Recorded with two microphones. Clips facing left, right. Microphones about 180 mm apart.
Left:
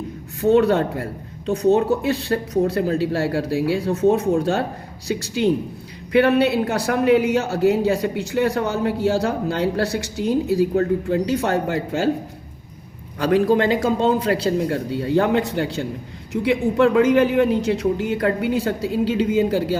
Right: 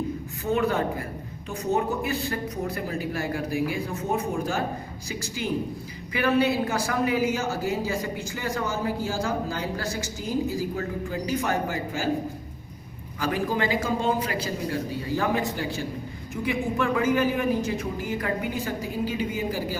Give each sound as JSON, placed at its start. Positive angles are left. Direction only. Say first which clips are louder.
{"t": 0.4, "sound": "speech", "louder": "left 9 dB", "side_deg": 75}
{"t": 13.1, "sound": "speech", "louder": "left 9 dB", "side_deg": 70}